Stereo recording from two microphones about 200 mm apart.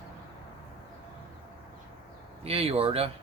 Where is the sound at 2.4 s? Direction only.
30° right (ahead or behind).